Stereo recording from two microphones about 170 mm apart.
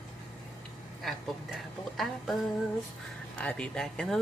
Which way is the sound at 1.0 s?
Centre (ahead or behind).